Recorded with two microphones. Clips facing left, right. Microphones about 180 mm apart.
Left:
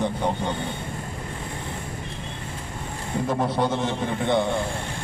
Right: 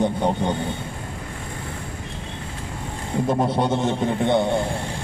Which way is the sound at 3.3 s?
25° right (ahead or behind).